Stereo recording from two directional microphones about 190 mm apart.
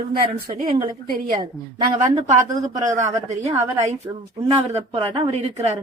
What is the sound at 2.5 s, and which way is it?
Speech, 20° right (ahead or behind).